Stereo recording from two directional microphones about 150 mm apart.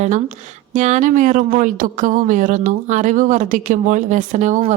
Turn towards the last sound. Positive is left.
turn(degrees=-55)  # may be behind; listen again after turning